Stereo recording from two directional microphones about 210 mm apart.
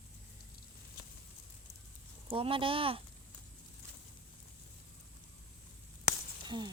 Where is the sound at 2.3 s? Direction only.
25° right (ahead or behind).